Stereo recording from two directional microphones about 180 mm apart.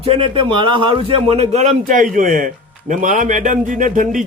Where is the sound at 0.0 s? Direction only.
30° right (ahead or behind).